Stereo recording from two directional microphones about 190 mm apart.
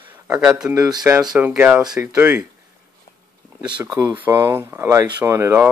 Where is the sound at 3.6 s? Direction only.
5° right (ahead or behind).